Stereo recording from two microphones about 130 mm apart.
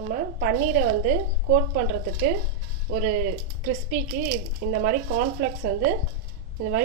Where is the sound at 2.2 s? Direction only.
90° right.